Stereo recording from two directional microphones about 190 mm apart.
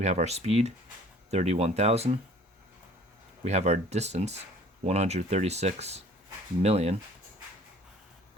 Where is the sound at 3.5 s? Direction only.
35° right (ahead or behind).